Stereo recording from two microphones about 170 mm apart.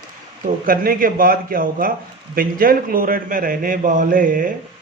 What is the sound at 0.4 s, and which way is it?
A man's voice, 55° right (ahead or behind).